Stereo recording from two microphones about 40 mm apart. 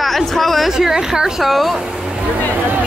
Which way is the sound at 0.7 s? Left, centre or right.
Centre.